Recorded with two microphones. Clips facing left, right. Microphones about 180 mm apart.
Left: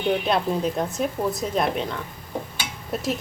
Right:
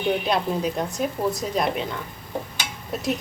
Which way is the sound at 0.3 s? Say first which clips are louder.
Left 1 dB; centre (ahead or behind).